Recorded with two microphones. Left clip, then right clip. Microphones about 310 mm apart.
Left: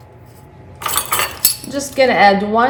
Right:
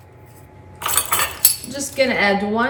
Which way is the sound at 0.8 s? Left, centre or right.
Centre.